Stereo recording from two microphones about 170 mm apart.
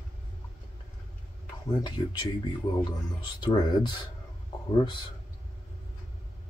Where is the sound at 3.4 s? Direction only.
25° left (ahead or behind).